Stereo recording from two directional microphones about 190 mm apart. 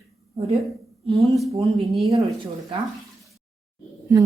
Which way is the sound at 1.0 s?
30° right (ahead or behind).